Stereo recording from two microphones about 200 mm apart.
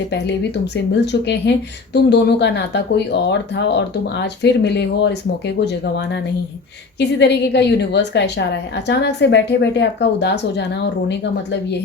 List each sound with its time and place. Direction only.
0.1 s speech: 60° left (ahead or behind)